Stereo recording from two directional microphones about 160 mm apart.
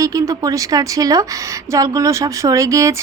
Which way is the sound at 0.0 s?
20° right (ahead or behind).